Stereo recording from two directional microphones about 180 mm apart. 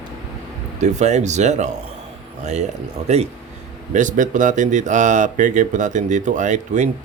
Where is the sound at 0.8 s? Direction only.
40° right (ahead or behind).